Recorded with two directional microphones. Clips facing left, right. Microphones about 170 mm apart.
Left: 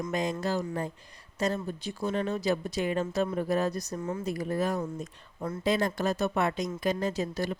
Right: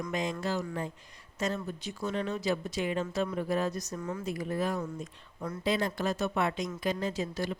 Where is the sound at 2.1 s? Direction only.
45° left (ahead or behind).